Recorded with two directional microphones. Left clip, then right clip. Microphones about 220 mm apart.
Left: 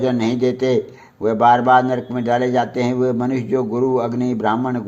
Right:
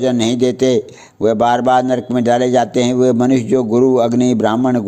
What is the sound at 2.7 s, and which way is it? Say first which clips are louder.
Speech: right 5 dB; 60° right (ahead or behind).